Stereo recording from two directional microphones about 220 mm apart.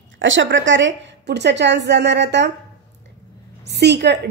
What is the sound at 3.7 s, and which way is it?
Speech, 50° right (ahead or behind).